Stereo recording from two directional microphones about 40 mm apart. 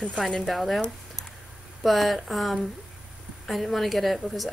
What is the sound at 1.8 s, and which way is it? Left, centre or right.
Speech, centre.